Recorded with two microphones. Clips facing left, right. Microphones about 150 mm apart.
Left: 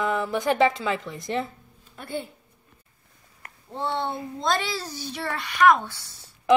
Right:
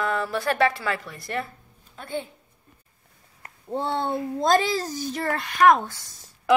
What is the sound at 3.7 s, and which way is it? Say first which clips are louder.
A child's voice: right 3 dB; 45° right (ahead or behind).